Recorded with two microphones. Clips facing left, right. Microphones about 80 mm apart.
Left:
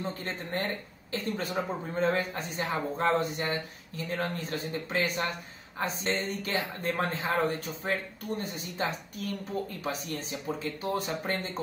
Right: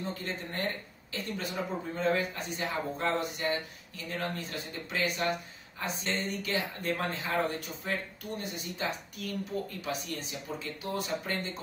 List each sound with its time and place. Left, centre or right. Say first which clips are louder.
0.0 s speech: left 1 dB; left